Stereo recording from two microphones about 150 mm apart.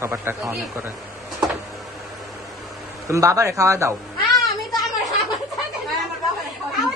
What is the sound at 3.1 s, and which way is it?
Speech, 20° right (ahead or behind).